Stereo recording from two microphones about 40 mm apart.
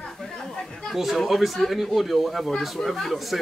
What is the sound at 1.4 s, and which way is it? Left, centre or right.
Speech, centre.